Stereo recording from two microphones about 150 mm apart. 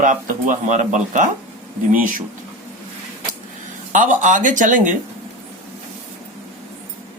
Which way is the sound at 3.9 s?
55° right (ahead or behind).